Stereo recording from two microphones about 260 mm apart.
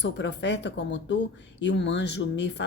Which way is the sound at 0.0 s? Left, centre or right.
Left.